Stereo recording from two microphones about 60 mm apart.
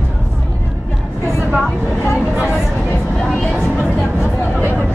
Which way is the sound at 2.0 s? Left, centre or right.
Left.